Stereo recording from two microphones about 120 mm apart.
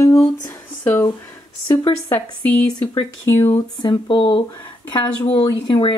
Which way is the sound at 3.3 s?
20° left (ahead or behind).